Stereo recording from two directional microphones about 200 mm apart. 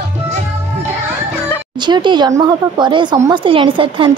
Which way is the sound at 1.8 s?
20° right (ahead or behind).